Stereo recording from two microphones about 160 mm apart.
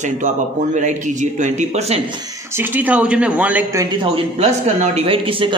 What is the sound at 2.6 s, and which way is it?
Speech, 10° right (ahead or behind).